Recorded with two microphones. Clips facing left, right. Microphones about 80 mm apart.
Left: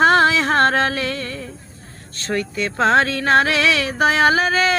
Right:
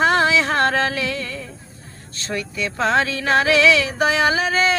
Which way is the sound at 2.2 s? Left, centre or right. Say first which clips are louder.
Left 3 dB; left.